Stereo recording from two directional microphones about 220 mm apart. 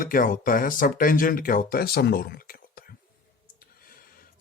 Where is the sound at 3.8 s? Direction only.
40° left (ahead or behind).